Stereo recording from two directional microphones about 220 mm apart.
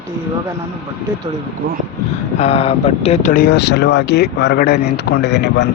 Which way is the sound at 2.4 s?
25° left (ahead or behind).